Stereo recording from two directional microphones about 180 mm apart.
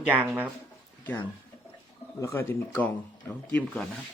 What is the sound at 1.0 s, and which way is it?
Speech, 10° left (ahead or behind).